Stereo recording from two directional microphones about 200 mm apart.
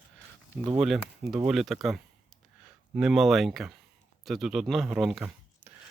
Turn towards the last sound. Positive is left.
turn(degrees=-5)  # may be behind; listen again after turning